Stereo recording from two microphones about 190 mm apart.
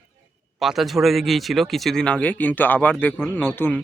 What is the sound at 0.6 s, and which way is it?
Speech, centre (ahead or behind).